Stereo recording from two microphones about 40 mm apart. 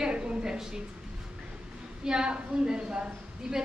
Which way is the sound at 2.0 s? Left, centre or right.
Right.